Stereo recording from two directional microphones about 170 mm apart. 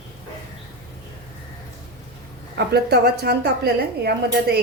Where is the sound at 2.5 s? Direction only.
75° right (ahead or behind).